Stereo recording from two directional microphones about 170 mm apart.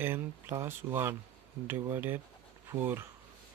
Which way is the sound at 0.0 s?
15° right (ahead or behind).